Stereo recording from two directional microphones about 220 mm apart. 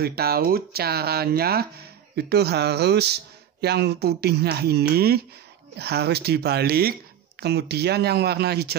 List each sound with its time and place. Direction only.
0.0 s speech: 45° right (ahead or behind)